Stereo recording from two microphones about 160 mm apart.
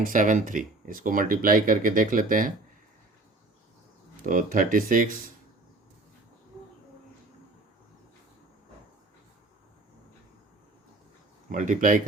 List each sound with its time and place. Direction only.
0.0 s speech: 55° right (ahead or behind)
4.2 s speech: 55° right (ahead or behind)
11.4 s speech: 55° right (ahead or behind)